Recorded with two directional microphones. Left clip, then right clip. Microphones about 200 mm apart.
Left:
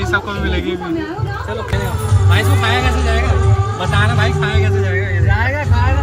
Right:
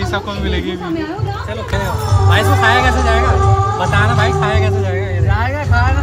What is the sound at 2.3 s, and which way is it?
Speech, 5° right (ahead or behind).